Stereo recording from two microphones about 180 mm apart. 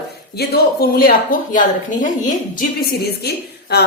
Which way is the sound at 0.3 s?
60° left (ahead or behind).